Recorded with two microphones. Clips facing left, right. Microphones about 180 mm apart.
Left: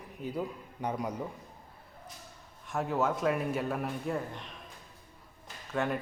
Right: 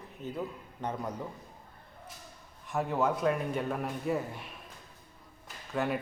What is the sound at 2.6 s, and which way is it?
Speech, centre (ahead or behind).